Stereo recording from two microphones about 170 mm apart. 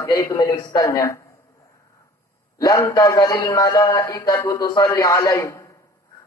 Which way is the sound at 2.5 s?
20° left (ahead or behind).